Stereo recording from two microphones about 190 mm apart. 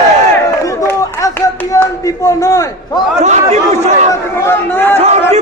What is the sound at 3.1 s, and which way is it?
Speech, 35° right (ahead or behind).